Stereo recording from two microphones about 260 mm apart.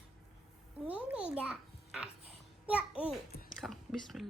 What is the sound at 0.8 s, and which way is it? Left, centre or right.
A child's voice, centre.